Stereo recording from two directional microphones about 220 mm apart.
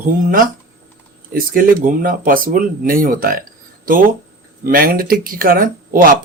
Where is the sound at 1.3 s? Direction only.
40° right (ahead or behind).